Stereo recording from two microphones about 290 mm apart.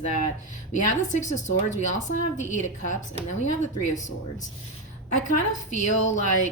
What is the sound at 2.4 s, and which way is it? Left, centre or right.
Speech, left.